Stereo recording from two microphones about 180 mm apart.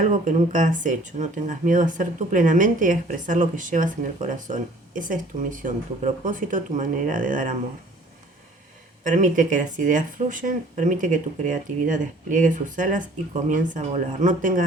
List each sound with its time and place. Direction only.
0.0 s speech: 45° right (ahead or behind)
9.0 s speech: 45° right (ahead or behind)